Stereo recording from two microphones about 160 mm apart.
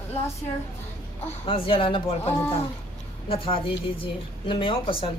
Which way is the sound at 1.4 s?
35° left (ahead or behind).